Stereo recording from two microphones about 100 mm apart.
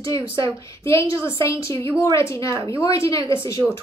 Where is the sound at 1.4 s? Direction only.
30° left (ahead or behind).